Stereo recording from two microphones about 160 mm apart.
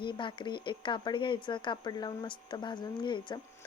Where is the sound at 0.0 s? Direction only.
30° left (ahead or behind).